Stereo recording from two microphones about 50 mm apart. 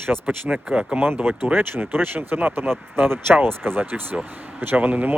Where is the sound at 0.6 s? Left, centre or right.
Right.